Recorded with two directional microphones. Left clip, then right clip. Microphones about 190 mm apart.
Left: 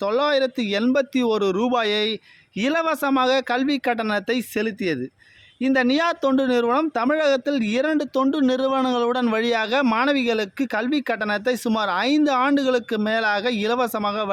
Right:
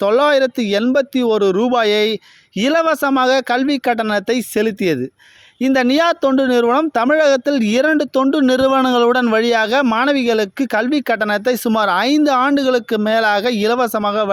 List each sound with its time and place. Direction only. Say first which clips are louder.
0.0 s a man's voice: right 7 dB; 40° right (ahead or behind)